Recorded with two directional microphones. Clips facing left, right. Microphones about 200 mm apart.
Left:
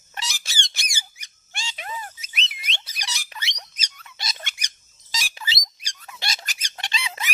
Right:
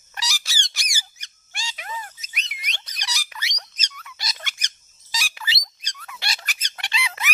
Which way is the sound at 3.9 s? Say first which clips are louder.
Even; 25° left (ahead or behind).